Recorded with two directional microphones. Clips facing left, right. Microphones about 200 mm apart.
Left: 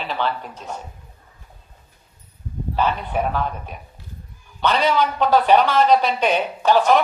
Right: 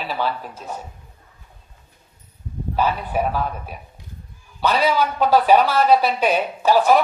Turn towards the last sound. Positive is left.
turn(degrees=-10)  # may be behind; listen again after turning